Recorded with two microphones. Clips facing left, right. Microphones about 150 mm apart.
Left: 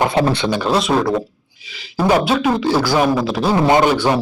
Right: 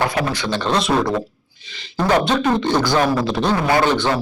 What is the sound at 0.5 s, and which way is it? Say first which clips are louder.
Speech: right 2 dB; 5° left (ahead or behind).